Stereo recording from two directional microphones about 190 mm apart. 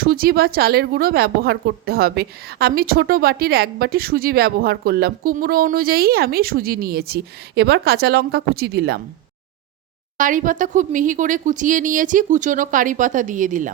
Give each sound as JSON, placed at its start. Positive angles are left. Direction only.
{"t": 0.0, "sound": "speech", "side_deg": -50}
{"t": 10.2, "sound": "speech", "side_deg": -45}